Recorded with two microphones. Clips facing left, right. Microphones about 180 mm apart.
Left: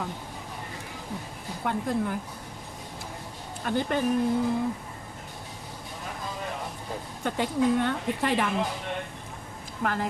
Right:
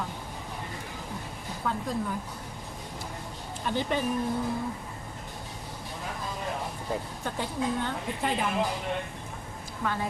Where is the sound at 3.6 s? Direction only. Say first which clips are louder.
Left 2 dB; 50° left (ahead or behind).